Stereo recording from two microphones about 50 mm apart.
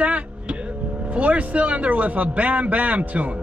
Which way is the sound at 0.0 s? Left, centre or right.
Right.